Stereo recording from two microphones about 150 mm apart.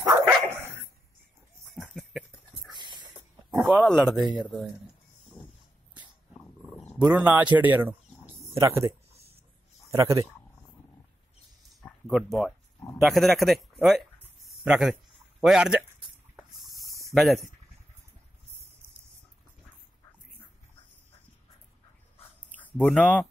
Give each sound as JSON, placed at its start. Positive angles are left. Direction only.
{"t": 0.5, "sound": "dog", "side_deg": -15}
{"t": 1.7, "sound": "dog", "side_deg": 0}
{"t": 3.5, "sound": "speech", "side_deg": -5}
{"t": 6.6, "sound": "roaring cats", "side_deg": 10}
{"t": 7.0, "sound": "speech", "side_deg": -10}
{"t": 12.1, "sound": "speech", "side_deg": 0}
{"t": 16.6, "sound": "a sound", "side_deg": 0}
{"t": 22.6, "sound": "speech", "side_deg": 10}